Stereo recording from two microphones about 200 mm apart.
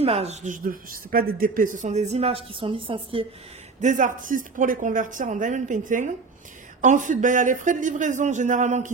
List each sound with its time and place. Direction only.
0.0 s a woman's voice: 30° right (ahead or behind)
3.8 s a woman's voice: 40° right (ahead or behind)